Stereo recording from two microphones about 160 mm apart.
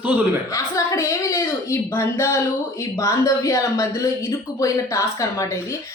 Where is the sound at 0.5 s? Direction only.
20° left (ahead or behind).